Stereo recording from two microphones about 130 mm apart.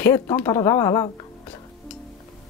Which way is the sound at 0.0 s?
20° left (ahead or behind).